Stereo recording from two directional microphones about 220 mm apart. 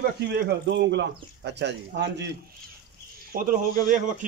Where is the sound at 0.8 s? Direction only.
50° right (ahead or behind).